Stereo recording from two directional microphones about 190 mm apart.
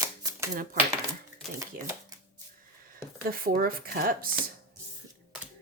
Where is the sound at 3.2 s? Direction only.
50° right (ahead or behind).